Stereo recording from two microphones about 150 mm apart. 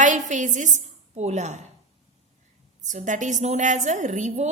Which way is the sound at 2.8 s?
55° right (ahead or behind).